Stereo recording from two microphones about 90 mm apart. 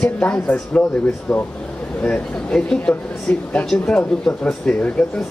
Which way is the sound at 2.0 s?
10° left (ahead or behind).